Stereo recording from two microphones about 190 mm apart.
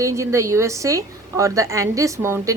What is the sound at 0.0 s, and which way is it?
A woman's voice, 15° right (ahead or behind).